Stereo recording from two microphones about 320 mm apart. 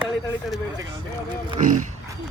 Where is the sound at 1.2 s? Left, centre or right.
Centre.